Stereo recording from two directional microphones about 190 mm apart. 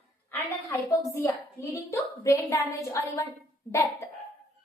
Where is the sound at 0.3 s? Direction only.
15° left (ahead or behind).